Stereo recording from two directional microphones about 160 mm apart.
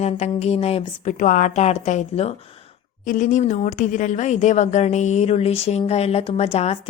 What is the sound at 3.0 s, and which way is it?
A woman's voice, 55° left (ahead or behind).